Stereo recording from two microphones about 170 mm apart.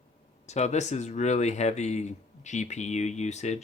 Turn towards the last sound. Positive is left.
turn(degrees=40)  # may be behind; listen again after turning